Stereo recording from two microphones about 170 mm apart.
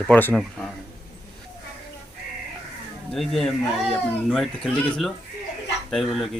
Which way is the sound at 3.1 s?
Centre (ahead or behind).